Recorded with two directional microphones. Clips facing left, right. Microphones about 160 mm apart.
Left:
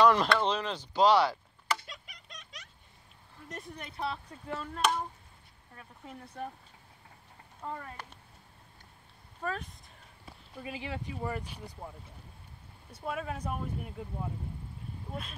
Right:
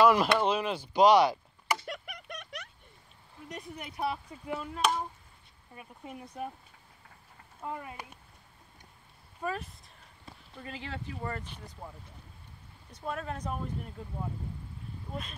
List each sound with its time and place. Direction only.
0.0 s a sound: 10° right (ahead or behind)
0.3 s speech: 10° right (ahead or behind)
1.9 s a sound: 60° right (ahead or behind)
3.4 s speech: centre (ahead or behind)
3.8 s speech: 15° right (ahead or behind)
7.6 s speech: 10° right (ahead or behind)
9.4 s speech: 5° right (ahead or behind)
10.5 s speech: 10° left (ahead or behind)
12.9 s speech: 5° left (ahead or behind)